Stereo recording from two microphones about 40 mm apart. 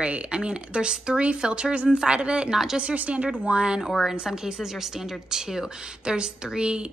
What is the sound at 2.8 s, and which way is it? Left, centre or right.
A woman's voice, right.